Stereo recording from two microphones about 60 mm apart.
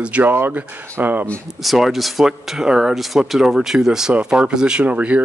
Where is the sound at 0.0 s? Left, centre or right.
Right.